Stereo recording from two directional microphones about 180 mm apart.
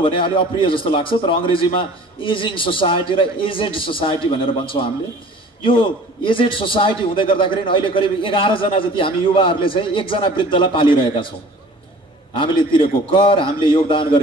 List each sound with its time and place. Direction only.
0.0 s a man's voice: 30° left (ahead or behind)
5.6 s a man's voice: 30° left (ahead or behind)
12.4 s a man's voice: 30° left (ahead or behind)